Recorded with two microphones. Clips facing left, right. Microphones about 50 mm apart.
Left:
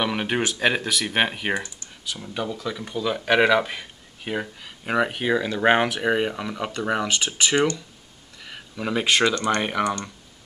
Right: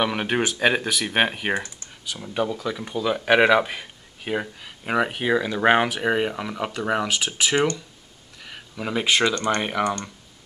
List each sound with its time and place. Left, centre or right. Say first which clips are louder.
0.0 s speech: right 1 dB; centre
8.4 s a sound: left 1 dB; centre
9.6 s speech: even; centre